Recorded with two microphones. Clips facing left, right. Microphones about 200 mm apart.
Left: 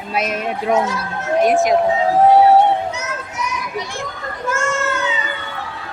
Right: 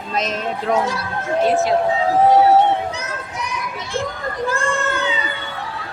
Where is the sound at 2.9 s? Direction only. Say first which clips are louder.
Left 1 dB; 35° right (ahead or behind).